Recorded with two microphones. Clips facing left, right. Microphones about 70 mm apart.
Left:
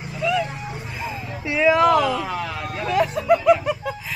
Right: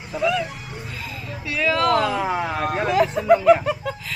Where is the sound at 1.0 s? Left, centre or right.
Left.